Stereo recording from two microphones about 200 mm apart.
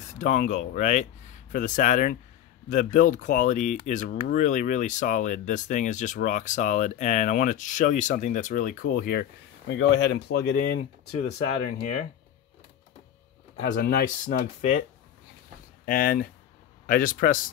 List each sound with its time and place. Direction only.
0.0 s speech: 35° left (ahead or behind); by 10.8 s 55° left (ahead or behind)
10.8 s speech: 35° left (ahead or behind)
13.6 s speech: 45° left (ahead or behind)